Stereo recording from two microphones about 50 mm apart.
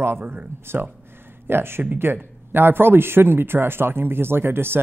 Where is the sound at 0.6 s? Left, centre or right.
Right.